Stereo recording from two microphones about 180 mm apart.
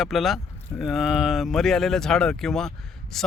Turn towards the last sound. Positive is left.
turn(degrees=0)  # may be behind; listen again after turning